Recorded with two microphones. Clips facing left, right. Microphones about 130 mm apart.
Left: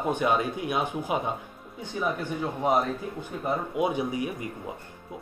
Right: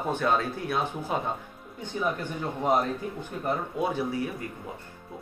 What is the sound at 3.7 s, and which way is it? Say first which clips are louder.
Speech: left 1 dB; 15° left (ahead or behind).